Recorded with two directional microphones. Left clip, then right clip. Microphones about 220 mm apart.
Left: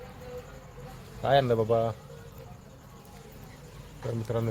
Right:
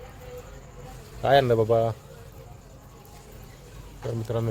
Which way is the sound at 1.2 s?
30° right (ahead or behind).